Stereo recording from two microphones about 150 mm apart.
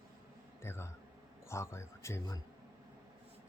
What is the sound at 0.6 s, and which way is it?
A man's voice, 15° left (ahead or behind).